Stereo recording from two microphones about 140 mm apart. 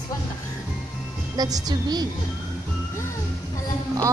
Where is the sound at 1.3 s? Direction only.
30° right (ahead or behind).